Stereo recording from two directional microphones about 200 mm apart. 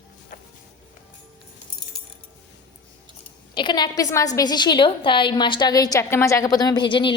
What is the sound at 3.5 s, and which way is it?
A woman's voice, 20° left (ahead or behind).